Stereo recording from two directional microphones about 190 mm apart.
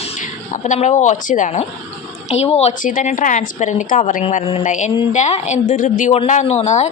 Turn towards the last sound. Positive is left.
turn(degrees=35)  # may be behind; listen again after turning